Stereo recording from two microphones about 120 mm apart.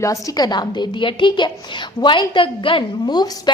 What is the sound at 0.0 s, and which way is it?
A woman's voice, 30° left (ahead or behind).